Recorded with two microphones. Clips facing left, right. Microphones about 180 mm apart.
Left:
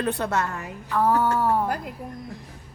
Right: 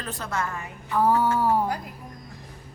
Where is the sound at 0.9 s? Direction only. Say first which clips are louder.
Even; centre (ahead or behind).